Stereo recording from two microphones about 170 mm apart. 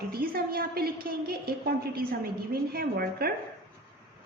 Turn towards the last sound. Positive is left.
turn(degrees=-60)  # may be behind; listen again after turning